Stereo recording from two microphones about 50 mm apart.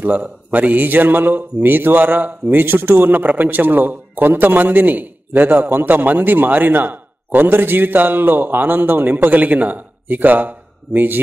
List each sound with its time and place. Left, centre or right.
0.0 s a man's voice: right